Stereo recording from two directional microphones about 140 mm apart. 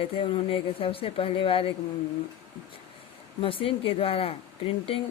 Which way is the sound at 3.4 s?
40° left (ahead or behind).